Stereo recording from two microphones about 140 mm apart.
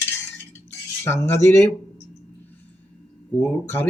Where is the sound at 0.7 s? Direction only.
20° left (ahead or behind).